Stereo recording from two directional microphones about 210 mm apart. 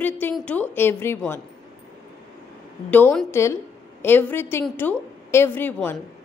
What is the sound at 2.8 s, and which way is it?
A woman's voice, 5° left (ahead or behind).